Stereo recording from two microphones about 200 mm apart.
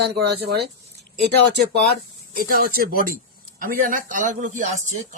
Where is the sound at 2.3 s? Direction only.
50° right (ahead or behind).